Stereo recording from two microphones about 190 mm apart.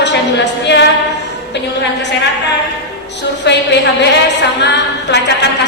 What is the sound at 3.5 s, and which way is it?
Speech, 65° left (ahead or behind).